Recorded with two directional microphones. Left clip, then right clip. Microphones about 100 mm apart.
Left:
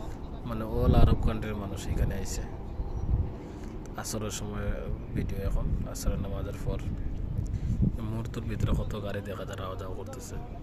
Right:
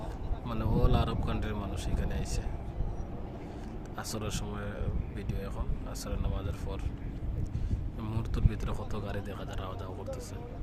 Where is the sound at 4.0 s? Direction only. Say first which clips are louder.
Left 2 dB; 20° left (ahead or behind).